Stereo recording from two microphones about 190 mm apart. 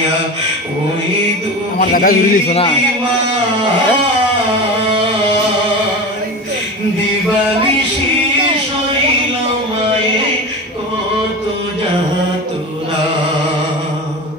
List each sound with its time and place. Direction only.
1.8 s a man's voice: 50° left (ahead or behind)